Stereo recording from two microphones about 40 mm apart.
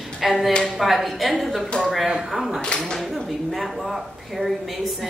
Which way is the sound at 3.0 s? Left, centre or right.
Centre.